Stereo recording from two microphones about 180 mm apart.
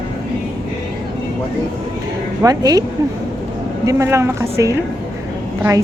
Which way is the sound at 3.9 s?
15° right (ahead or behind).